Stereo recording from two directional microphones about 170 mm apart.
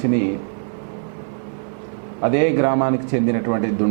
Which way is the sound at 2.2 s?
15° right (ahead or behind).